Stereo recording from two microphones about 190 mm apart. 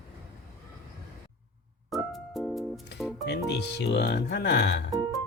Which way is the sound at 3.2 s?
60° left (ahead or behind).